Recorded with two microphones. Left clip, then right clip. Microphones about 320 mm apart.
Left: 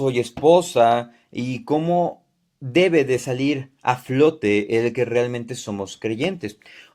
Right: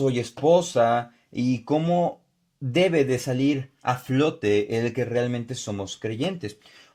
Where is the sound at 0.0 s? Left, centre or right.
Right.